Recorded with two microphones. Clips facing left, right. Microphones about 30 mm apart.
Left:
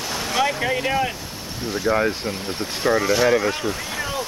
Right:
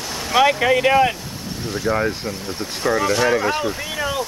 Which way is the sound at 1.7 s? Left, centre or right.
Centre.